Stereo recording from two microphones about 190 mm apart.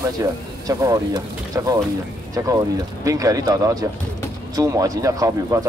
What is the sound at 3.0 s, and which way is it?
Speech, 15° right (ahead or behind).